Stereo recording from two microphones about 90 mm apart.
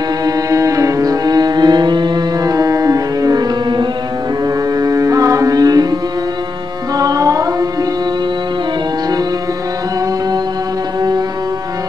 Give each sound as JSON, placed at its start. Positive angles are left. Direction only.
{"t": 0.2, "sound": "music", "side_deg": -40}
{"t": 4.7, "sound": "music", "side_deg": -40}
{"t": 7.0, "sound": "music", "side_deg": -40}